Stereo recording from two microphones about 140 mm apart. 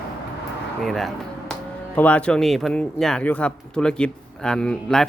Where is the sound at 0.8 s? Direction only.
Centre (ahead or behind).